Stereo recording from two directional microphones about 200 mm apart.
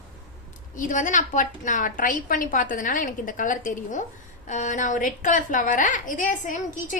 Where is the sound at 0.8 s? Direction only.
40° left (ahead or behind).